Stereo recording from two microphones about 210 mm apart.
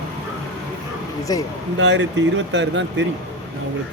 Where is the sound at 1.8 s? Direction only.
60° right (ahead or behind).